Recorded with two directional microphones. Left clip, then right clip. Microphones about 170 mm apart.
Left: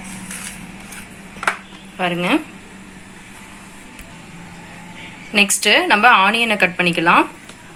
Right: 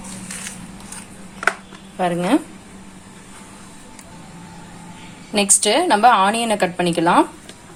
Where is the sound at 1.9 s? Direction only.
50° right (ahead or behind).